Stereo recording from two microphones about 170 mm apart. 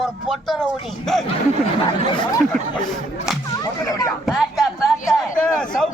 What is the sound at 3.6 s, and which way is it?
Speech, 20° left (ahead or behind).